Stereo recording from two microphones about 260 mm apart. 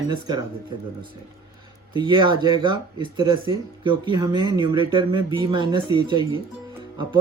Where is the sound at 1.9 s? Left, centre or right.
Centre.